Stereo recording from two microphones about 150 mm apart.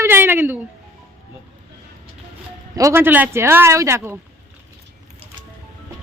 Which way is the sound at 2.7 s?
20° right (ahead or behind).